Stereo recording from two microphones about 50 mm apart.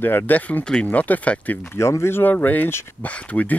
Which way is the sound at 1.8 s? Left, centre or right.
Left.